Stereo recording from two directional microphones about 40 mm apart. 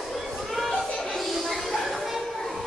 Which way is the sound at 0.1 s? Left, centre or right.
Centre.